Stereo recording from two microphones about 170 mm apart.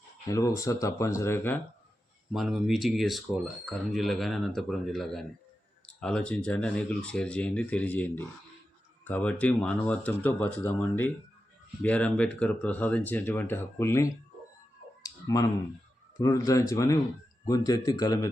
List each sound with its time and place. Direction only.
0.3 s speech: 20° left (ahead or behind)
2.3 s speech: centre (ahead or behind); by 14.1 s 15° left (ahead or behind)
15.0 s clicking: 20° left (ahead or behind)
16.1 s speech: 20° left (ahead or behind)